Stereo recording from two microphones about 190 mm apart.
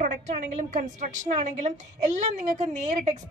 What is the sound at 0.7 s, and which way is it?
A woman's voice, 40° right (ahead or behind).